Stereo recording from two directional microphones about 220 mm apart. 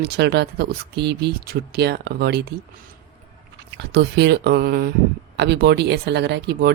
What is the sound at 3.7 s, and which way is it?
Speech, 50° right (ahead or behind).